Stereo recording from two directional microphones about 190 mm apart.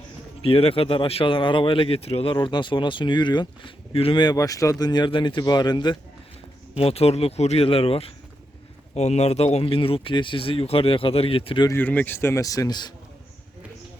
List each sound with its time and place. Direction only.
0.4 s speech: 30° left (ahead or behind)
11.7 s speech: 10° left (ahead or behind)